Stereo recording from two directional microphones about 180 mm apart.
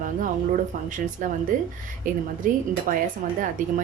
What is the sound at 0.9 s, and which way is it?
A woman's voice, 45° right (ahead or behind).